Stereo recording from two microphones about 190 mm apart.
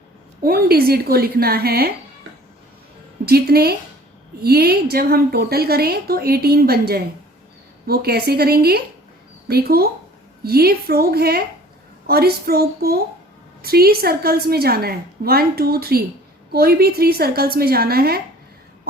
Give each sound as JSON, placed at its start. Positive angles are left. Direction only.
{"t": 0.4, "sound": "a woman's voice", "side_deg": -55}
{"t": 3.2, "sound": "a woman's voice", "side_deg": -55}